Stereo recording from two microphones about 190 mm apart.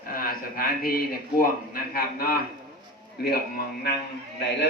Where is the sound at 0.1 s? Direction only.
50° left (ahead or behind).